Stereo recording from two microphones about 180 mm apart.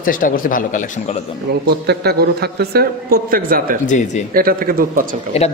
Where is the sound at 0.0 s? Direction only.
50° left (ahead or behind).